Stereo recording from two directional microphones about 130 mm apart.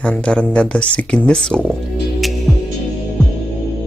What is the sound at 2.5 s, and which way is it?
Music, centre (ahead or behind).